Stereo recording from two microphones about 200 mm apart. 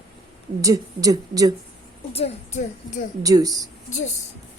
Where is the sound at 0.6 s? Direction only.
15° right (ahead or behind).